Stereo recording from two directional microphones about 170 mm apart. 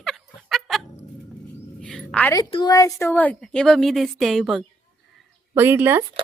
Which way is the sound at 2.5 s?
25° left (ahead or behind).